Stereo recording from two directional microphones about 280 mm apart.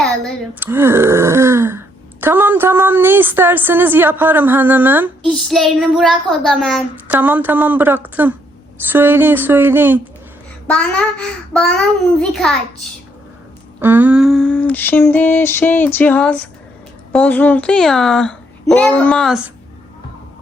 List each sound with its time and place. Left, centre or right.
0.0 s a woman's voice: centre
5.4 s child singing: centre
8.9 s speech: centre
10.7 s child singing: centre
13.7 s child singing: centre